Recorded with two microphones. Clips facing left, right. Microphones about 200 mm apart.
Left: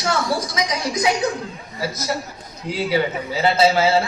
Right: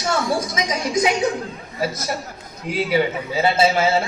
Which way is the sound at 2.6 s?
20° right (ahead or behind).